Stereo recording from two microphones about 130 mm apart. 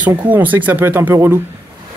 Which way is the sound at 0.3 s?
15° right (ahead or behind).